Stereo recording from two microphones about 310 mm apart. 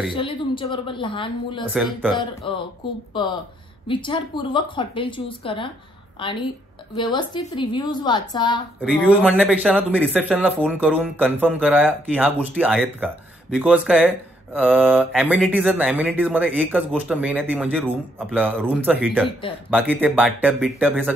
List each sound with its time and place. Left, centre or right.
0.1 s a woman's voice: centre
1.7 s a man's voice: centre
2.1 s a woman's voice: centre
8.8 s a man's voice: centre